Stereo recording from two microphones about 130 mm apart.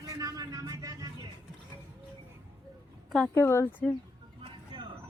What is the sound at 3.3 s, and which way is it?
Speech, 20° left (ahead or behind).